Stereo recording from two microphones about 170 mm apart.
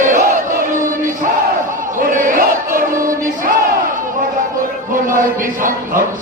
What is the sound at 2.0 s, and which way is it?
Battle cry, 55° right (ahead or behind).